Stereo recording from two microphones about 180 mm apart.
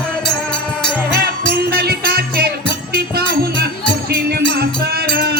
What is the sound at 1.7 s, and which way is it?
Music, 60° right (ahead or behind).